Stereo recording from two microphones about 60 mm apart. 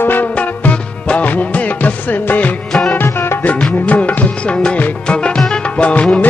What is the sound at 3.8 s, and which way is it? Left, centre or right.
Music, left.